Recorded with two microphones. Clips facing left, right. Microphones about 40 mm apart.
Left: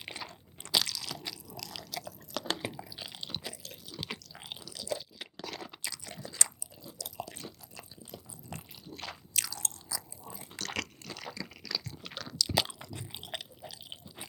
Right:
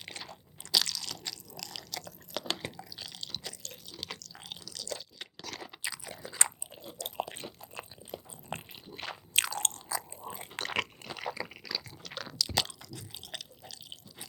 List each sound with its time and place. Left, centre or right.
0.0 s crunch: centre
2.6 s a sound: centre
3.6 s drip: centre
5.5 s crunch: centre
5.8 s crunch: centre
6.4 s chewing: right
9.4 s biting: right
10.2 s dog: right
10.6 s crunch: right
11.7 s crunch: centre
12.2 s biting: centre
12.5 s biting: centre
12.8 s chewing: left